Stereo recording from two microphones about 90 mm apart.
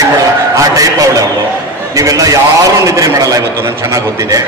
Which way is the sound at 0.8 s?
40° right (ahead or behind).